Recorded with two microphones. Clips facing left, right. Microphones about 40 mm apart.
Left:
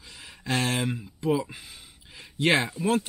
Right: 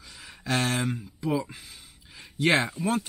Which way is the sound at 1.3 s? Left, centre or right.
Centre.